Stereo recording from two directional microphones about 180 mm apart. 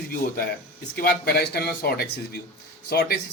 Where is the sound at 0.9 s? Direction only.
60° left (ahead or behind).